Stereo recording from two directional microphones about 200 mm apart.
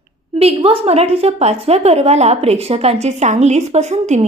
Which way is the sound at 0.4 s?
30° right (ahead or behind).